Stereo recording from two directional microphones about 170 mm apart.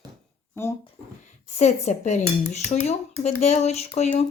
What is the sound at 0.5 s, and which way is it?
Speech, 15° left (ahead or behind).